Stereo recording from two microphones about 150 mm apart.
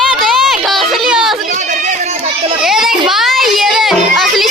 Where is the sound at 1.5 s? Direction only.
50° right (ahead or behind).